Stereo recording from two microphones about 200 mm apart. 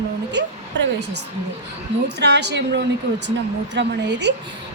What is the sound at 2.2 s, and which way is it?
A woman's voice, 60° right (ahead or behind).